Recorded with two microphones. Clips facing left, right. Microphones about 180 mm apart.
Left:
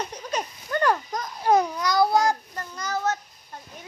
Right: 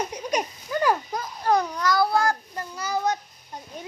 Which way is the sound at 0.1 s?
10° right (ahead or behind).